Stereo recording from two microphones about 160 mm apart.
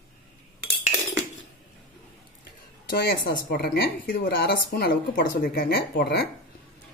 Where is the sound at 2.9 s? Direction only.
75° left (ahead or behind).